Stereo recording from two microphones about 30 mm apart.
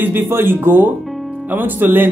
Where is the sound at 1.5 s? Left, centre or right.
Right.